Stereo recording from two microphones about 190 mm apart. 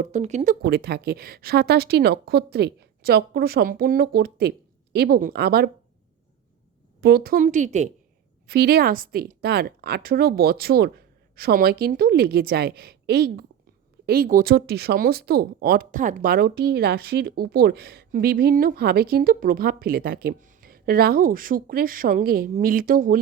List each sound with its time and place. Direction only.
0.0 s speech: 40° right (ahead or behind)
0.6 s speech: 55° right (ahead or behind)
7.0 s speech: 55° right (ahead or behind)
8.4 s speech: 55° right (ahead or behind)